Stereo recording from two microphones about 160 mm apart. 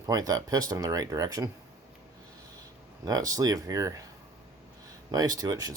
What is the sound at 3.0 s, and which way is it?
Speech, 20° right (ahead or behind).